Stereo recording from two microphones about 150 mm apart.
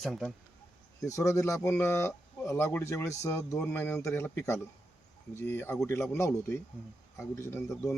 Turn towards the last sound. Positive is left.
turn(degrees=20)  # may be behind; listen again after turning